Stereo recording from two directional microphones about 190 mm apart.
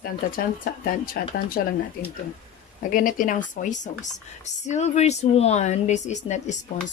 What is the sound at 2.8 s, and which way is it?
Speech, 45° left (ahead or behind).